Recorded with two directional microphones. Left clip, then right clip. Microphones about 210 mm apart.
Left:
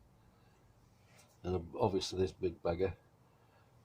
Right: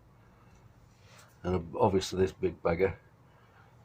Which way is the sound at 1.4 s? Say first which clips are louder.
Right 7 dB; 40° left (ahead or behind).